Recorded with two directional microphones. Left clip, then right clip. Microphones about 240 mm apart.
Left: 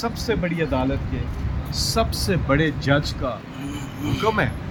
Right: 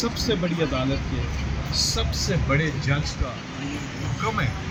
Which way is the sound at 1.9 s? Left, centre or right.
Left.